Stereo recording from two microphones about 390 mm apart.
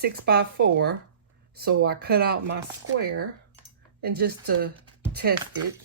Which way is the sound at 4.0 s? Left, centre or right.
Right.